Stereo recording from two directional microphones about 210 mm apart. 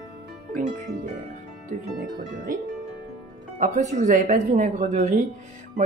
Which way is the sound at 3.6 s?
35° right (ahead or behind).